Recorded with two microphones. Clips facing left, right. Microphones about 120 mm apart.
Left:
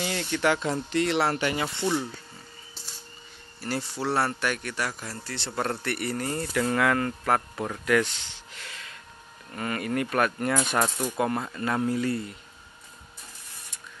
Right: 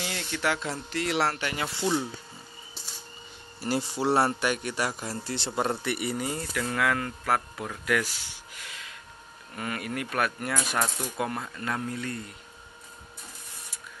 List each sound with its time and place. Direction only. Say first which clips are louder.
0.0 s speech: left 4 dB; centre (ahead or behind)
3.6 s speech: right 3 dB; 10° right (ahead or behind)
4.1 s a man's voice: right 2 dB; 25° right (ahead or behind); by 12.2 s 5° left (ahead or behind)